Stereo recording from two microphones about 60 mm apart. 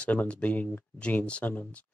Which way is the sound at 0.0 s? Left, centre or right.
Left.